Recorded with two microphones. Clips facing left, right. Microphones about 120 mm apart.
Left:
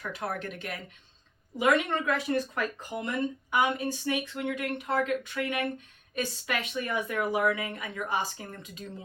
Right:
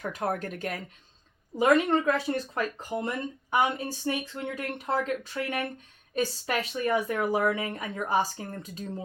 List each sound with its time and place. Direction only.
0.0 s a woman's voice: 40° right (ahead or behind)